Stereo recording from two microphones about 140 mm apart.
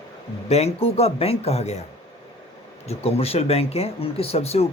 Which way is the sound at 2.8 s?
50° left (ahead or behind).